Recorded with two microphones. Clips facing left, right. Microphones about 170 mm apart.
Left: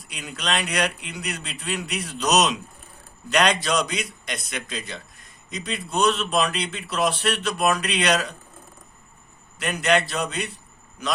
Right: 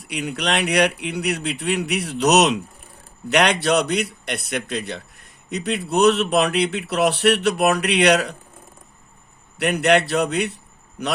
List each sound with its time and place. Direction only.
0.0 s speech: 65° right (ahead or behind)
9.6 s speech: 65° right (ahead or behind)